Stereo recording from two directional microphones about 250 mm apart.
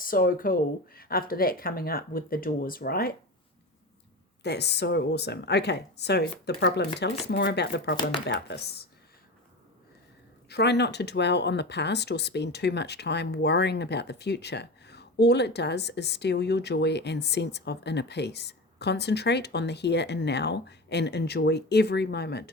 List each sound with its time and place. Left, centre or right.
0.0 s speech: left
4.4 s speech: left
7.9 s speech: centre
8.3 s speech: left
10.5 s speech: left